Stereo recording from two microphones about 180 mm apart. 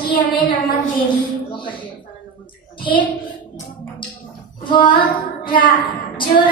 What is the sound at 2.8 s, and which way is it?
Speech, 25° left (ahead or behind).